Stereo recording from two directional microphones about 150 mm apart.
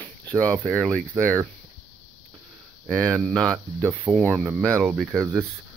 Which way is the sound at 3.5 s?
10° right (ahead or behind).